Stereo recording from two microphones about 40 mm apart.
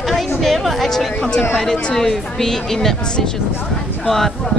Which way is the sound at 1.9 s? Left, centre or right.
Centre.